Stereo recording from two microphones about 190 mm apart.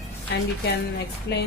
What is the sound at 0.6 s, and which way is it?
Speech, 60° left (ahead or behind).